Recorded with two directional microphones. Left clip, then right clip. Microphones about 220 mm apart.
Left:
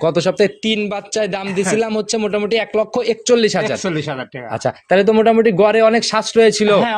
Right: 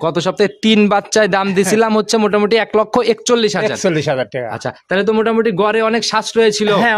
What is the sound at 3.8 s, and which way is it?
Speech, 50° right (ahead or behind).